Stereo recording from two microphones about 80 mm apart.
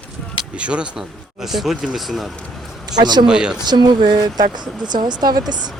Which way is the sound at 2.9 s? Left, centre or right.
Right.